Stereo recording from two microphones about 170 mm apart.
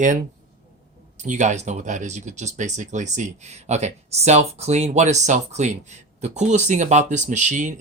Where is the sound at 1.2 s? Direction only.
45° right (ahead or behind).